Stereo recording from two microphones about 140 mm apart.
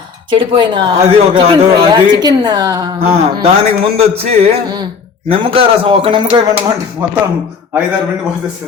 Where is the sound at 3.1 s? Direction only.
45° right (ahead or behind).